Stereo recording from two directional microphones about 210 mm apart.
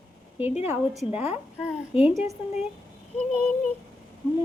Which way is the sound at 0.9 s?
5° right (ahead or behind).